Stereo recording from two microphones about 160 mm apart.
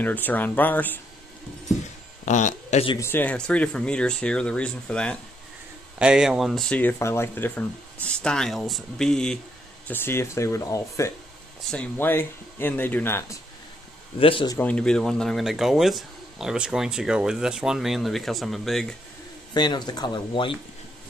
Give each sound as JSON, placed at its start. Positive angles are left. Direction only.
{"t": 0.0, "sound": "speech", "side_deg": 10}
{"t": 2.2, "sound": "speech", "side_deg": 50}
{"t": 3.0, "sound": "speech", "side_deg": 15}
{"t": 5.9, "sound": "speech", "side_deg": -5}
{"t": 14.2, "sound": "speech", "side_deg": 30}
{"t": 14.6, "sound": "speech", "side_deg": 5}
{"t": 19.5, "sound": "speech", "side_deg": 25}